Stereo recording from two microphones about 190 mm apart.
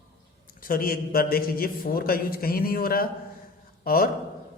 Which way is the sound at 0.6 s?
50° left (ahead or behind).